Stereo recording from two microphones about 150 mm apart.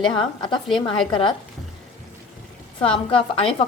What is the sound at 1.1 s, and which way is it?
Speech, 35° left (ahead or behind).